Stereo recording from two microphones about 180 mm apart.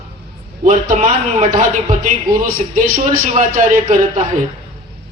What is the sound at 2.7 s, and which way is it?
Speech, 50° right (ahead or behind).